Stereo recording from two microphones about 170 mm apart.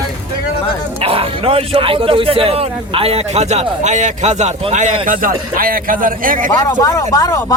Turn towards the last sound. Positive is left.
turn(degrees=20)  # may be behind; listen again after turning